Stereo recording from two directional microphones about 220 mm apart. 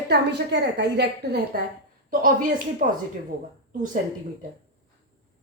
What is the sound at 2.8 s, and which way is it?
Speech, 35° right (ahead or behind).